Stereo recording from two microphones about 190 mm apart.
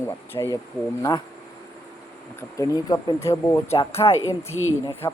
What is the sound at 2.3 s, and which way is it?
Speech, 15° left (ahead or behind).